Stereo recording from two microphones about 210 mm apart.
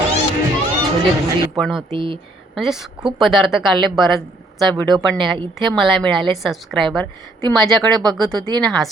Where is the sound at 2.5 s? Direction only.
Centre (ahead or behind).